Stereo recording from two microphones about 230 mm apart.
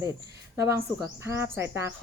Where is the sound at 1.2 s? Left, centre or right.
Centre.